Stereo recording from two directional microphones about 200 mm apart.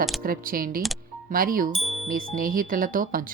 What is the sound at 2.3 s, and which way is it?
Speech, 45° right (ahead or behind).